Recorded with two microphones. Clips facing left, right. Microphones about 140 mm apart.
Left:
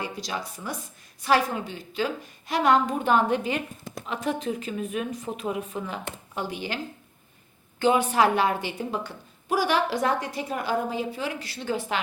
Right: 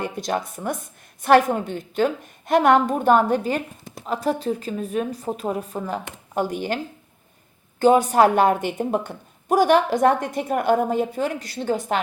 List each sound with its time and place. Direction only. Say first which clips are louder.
0.0 s a woman's voice: right 7 dB; 55° right (ahead or behind)
7.8 s a woman's voice: right 6 dB; 40° right (ahead or behind)